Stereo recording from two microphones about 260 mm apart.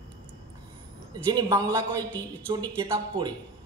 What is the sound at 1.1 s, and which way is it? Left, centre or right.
A man's voice, centre.